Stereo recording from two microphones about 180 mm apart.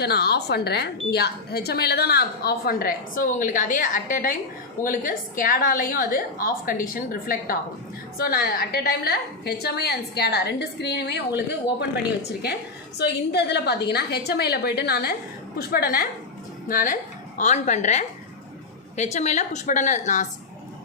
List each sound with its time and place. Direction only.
0.0 s a woman's voice: 65° left (ahead or behind)
13.0 s a woman's voice: 65° left (ahead or behind); by 20.2 s 45° left (ahead or behind)